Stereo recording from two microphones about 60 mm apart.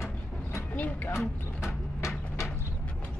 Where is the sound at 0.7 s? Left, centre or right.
Left.